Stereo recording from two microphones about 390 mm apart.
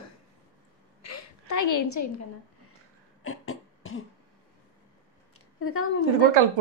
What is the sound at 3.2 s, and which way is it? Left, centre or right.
Beatboxing, left.